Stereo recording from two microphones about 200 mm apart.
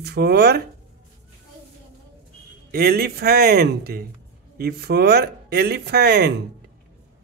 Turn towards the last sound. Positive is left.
turn(degrees=-55)  # may be behind; listen again after turning